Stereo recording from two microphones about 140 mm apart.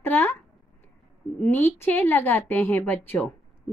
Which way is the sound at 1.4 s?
15° left (ahead or behind).